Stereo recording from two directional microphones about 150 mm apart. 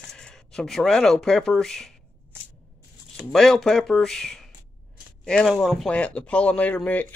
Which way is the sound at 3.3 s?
5° left (ahead or behind).